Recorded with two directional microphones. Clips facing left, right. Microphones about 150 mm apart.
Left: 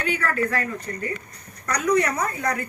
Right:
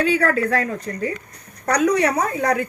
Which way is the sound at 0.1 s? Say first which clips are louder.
Right 6 dB; 90° right.